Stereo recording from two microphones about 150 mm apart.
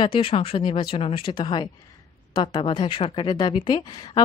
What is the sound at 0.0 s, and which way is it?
A woman's voice, 35° left (ahead or behind).